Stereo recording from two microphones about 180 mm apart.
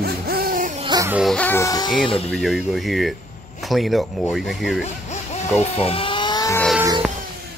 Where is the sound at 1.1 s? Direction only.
Centre (ahead or behind).